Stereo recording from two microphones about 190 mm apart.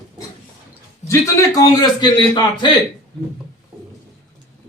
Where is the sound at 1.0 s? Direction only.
15° left (ahead or behind).